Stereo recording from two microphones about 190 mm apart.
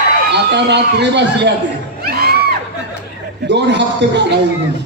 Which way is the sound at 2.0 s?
55° right (ahead or behind).